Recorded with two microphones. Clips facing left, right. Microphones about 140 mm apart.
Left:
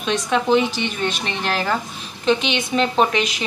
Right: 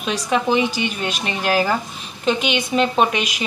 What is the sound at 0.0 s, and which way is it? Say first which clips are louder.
A woman's voice: even; 5° right (ahead or behind).